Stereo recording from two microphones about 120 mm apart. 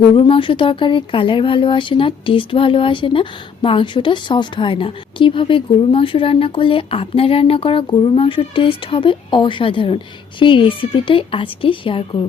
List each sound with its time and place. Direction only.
0.2 s speech: 45° left (ahead or behind)